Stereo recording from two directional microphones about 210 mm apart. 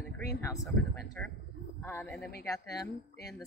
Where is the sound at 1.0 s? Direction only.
15° left (ahead or behind).